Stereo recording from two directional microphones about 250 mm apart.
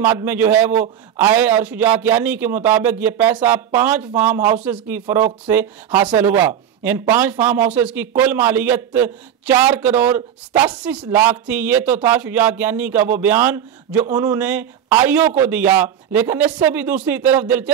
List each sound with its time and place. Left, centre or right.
0.0 s a man's voice: centre